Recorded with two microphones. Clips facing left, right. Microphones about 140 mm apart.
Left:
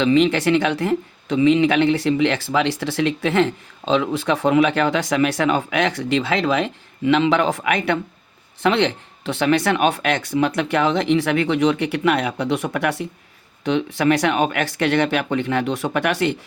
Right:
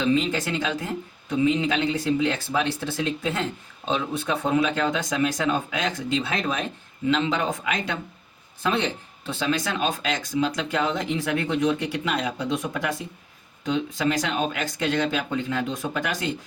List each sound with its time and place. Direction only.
0.0 s speech: 75° left (ahead or behind)